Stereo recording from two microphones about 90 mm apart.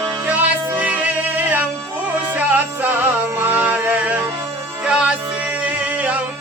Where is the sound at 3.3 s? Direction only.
20° right (ahead or behind).